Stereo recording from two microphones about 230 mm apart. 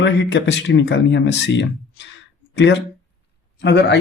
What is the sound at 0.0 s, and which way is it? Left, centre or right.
Speech, left.